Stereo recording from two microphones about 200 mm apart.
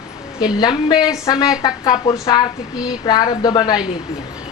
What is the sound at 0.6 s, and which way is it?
Speech, 20° left (ahead or behind).